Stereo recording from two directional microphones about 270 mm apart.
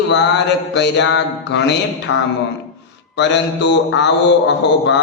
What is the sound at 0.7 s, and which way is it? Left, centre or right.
Speech, left.